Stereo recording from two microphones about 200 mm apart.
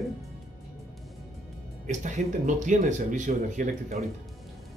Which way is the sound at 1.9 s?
35° right (ahead or behind).